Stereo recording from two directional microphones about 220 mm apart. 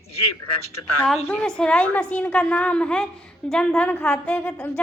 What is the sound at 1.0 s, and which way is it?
A woman's voice, 5° left (ahead or behind).